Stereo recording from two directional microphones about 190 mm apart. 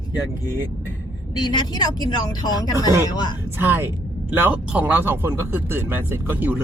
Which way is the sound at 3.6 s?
10° right (ahead or behind).